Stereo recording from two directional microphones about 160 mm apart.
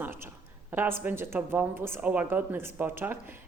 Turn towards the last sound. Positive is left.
turn(degrees=-15)  # may be behind; listen again after turning